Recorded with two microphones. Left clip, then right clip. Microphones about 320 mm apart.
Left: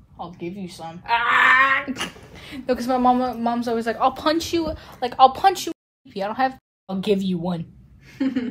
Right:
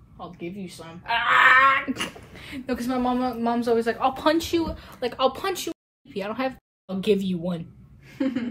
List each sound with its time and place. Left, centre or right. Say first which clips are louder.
1.0 s speech: left 1 dB; centre